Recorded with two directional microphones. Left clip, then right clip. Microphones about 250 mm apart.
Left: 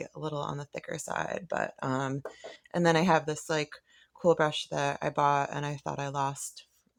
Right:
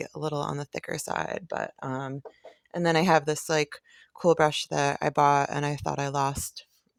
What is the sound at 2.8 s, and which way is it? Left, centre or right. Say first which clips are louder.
Speech: right 3 dB; right.